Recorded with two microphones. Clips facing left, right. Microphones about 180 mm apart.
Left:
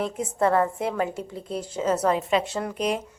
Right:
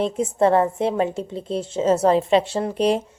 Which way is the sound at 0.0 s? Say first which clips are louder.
Right 5 dB; 25° right (ahead or behind).